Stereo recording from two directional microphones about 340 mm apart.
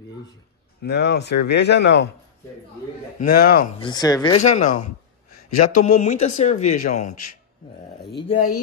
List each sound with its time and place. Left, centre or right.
0.8 s speech: left
3.2 s speech: left
3.8 s speech: centre
4.8 s a sound: left
5.9 s speech: left
7.0 s a man's voice: left
8.2 s speech: left